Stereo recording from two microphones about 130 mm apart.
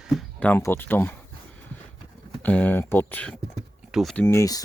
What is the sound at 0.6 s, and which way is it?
Speech, 15° left (ahead or behind).